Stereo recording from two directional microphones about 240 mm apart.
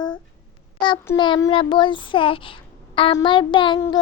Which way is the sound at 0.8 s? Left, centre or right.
Centre.